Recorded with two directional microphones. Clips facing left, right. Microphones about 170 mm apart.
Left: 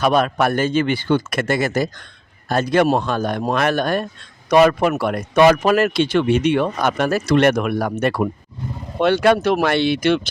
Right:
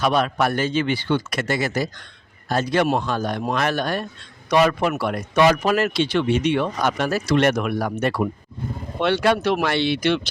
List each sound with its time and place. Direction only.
0.0 s speech: 50° left (ahead or behind)
3.0 s speech: 55° left (ahead or behind)